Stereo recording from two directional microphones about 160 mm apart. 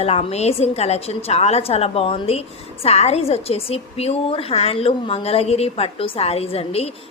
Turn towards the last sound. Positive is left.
turn(degrees=40)  # may be behind; listen again after turning